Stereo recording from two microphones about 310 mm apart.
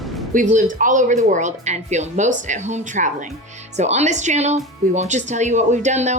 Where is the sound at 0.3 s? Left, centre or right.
Right.